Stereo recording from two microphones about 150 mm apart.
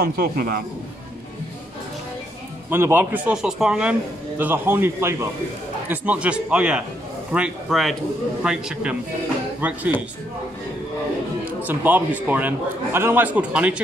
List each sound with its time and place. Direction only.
0.0 s a man's voice: 90° right
2.7 s a man's voice: 15° right (ahead or behind)
11.6 s a man's voice: 10° right (ahead or behind)